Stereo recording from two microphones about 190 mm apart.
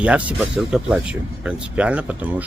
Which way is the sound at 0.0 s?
5° right (ahead or behind).